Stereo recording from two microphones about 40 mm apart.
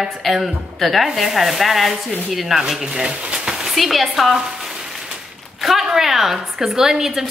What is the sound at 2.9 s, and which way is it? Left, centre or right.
Speech, right.